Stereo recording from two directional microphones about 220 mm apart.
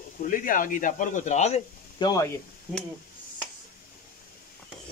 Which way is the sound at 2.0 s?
15° left (ahead or behind).